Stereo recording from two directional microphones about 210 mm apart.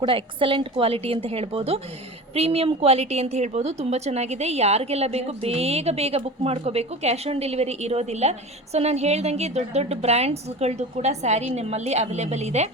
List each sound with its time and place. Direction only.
0.0 s a woman's voice: 25° right (ahead or behind)